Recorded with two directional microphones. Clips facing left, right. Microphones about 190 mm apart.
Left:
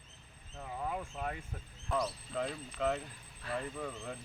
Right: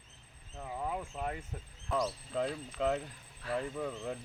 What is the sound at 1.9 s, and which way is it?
Speech, centre (ahead or behind).